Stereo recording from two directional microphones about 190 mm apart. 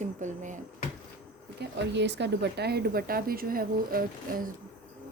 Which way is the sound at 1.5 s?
65° right (ahead or behind).